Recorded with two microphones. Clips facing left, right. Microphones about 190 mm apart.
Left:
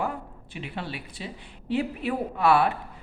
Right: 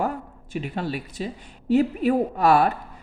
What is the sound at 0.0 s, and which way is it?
A woman's voice, 45° right (ahead or behind).